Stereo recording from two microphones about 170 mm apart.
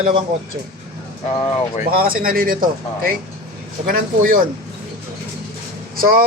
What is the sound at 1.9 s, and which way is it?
Speech, 60° right (ahead or behind).